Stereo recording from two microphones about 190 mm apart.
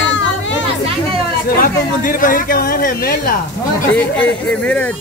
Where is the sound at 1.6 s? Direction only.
45° left (ahead or behind).